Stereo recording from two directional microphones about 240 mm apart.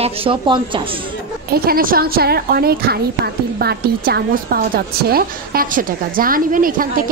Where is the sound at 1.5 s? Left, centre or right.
Right.